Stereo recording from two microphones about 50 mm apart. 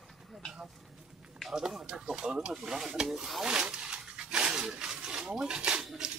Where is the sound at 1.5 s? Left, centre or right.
Centre.